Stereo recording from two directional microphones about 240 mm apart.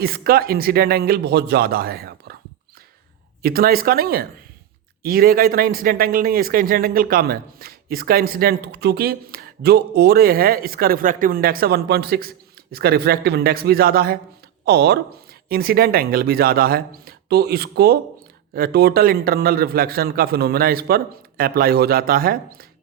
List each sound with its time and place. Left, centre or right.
0.0 s a man's voice: right
3.4 s a man's voice: right